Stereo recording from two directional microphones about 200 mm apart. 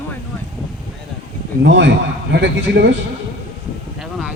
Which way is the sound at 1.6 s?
60° right (ahead or behind).